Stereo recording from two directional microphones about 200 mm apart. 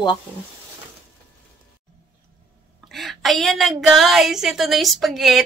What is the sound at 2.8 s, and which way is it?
A woman's voice, centre (ahead or behind).